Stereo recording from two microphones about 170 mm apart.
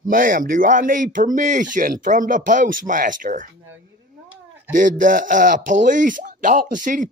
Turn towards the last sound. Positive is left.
turn(degrees=-50)  # may be behind; listen again after turning